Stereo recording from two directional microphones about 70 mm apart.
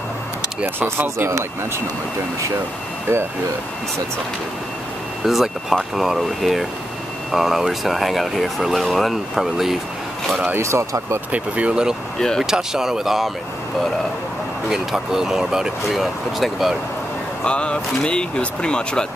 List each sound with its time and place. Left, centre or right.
0.7 s speech: right
1.1 s speech: right
5.2 s speech: centre
10.5 s speech: right
11.3 s speech: centre
12.2 s speech: centre
12.4 s speech: centre
14.7 s speech: centre
17.5 s speech: centre